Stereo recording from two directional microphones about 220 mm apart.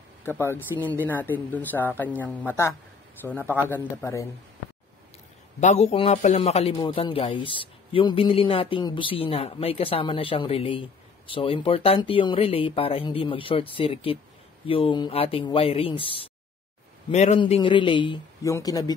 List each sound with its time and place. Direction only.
0.2 s speech: 10° left (ahead or behind)
5.6 s a man's voice: 30° left (ahead or behind)